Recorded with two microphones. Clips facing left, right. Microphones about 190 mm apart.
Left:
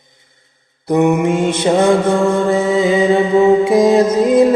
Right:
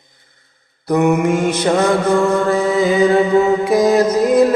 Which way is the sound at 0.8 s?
20° left (ahead or behind).